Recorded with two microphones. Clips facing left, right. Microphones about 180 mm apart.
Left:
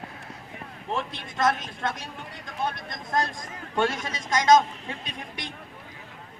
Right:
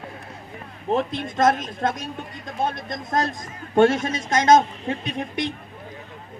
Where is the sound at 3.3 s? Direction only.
45° right (ahead or behind).